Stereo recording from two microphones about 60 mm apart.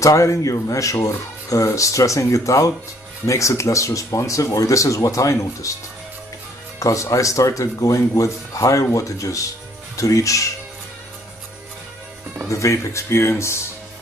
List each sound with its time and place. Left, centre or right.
0.0 s speech: left
6.8 s speech: left
12.4 s speech: left